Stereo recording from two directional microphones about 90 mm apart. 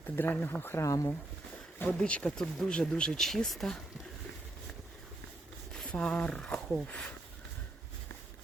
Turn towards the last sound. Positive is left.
turn(degrees=10)  # may be behind; listen again after turning